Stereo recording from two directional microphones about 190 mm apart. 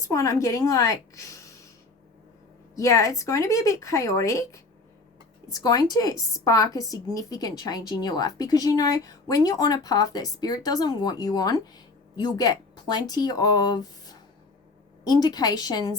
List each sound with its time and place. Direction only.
0.0 s a woman's voice: 15° left (ahead or behind)
2.7 s a woman's voice: 15° left (ahead or behind)